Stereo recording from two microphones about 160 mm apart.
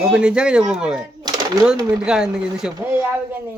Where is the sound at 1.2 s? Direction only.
25° right (ahead or behind).